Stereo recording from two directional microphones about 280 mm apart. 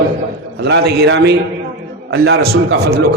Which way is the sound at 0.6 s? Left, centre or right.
Right.